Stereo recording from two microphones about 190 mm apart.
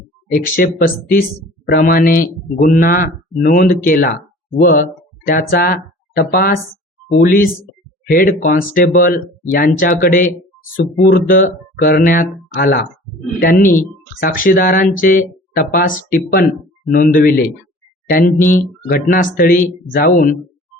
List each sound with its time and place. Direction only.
0.3 s speech: 45° left (ahead or behind)